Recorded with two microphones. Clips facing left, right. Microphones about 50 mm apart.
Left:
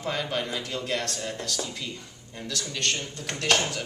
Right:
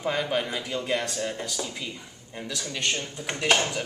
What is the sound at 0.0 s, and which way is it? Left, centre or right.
Speech, centre.